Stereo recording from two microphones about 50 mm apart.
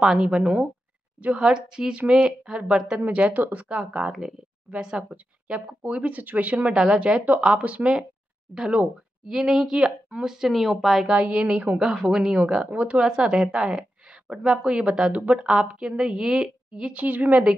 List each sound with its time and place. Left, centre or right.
0.0 s a woman's voice: centre
5.1 s speech: right
6.7 s a woman's voice: right
10.5 s speech: centre
11.1 s a woman's voice: right
12.6 s speech: right
13.1 s a woman's voice: centre
16.9 s speech: right